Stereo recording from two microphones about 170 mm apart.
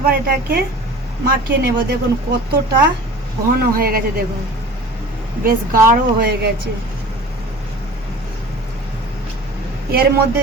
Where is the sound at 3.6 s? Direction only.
60° right (ahead or behind).